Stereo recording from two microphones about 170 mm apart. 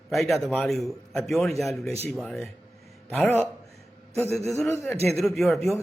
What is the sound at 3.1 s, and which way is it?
Speech, 10° left (ahead or behind).